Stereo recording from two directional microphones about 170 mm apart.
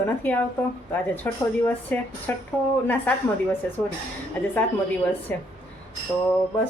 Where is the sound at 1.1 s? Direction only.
10° left (ahead or behind).